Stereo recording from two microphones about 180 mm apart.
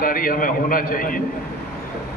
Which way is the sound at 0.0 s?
50° left (ahead or behind).